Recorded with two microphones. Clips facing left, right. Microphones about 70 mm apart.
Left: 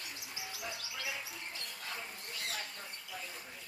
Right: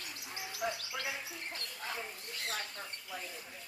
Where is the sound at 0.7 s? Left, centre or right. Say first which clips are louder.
Right 5 dB; right.